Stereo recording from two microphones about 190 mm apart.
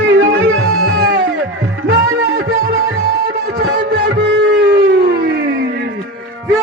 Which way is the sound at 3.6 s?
60° right (ahead or behind).